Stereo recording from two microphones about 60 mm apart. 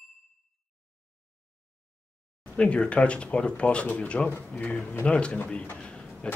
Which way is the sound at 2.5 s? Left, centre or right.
Centre.